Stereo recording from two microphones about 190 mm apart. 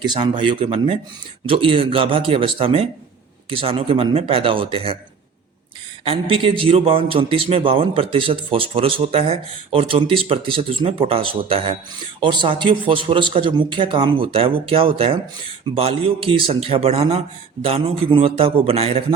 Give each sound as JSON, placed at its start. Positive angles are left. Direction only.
{"t": 0.0, "sound": "speech", "side_deg": -25}
{"t": 6.1, "sound": "speech", "side_deg": -30}